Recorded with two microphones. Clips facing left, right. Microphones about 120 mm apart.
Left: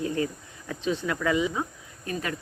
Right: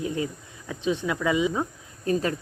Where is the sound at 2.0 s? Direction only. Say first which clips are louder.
Right 7 dB; 30° right (ahead or behind).